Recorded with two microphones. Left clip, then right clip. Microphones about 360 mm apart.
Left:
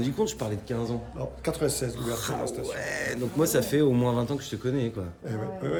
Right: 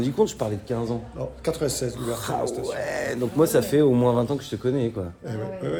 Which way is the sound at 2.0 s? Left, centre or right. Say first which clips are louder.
Right 4 dB; centre.